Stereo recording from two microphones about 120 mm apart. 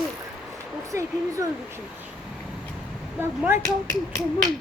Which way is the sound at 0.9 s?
25° right (ahead or behind).